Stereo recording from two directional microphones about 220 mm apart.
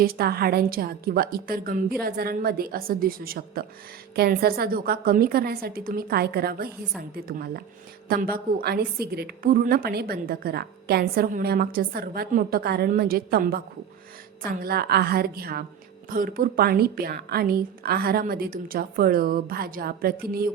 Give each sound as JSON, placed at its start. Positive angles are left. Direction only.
{"t": 0.0, "sound": "a woman's voice", "side_deg": -45}